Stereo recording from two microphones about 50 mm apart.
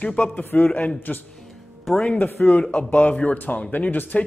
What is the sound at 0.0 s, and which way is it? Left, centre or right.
Speech, left.